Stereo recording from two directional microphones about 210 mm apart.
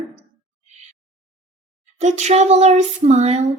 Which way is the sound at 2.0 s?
35° right (ahead or behind).